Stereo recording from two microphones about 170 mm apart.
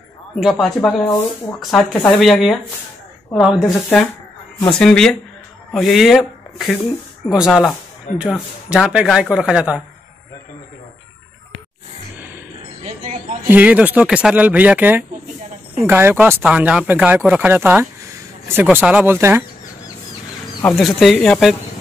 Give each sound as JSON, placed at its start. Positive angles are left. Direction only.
{"t": 0.4, "sound": "speech", "side_deg": 0}
{"t": 12.8, "sound": "music", "side_deg": -45}
{"t": 13.5, "sound": "speech", "side_deg": -10}
{"t": 20.6, "sound": "speech", "side_deg": 0}